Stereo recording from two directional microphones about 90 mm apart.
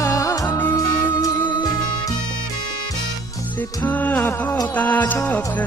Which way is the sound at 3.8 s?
20° left (ahead or behind).